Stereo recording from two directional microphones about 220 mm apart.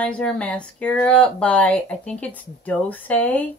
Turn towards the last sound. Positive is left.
turn(degrees=5)  # may be behind; listen again after turning